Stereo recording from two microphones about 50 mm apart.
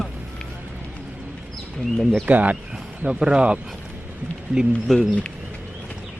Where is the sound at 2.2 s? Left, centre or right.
Right.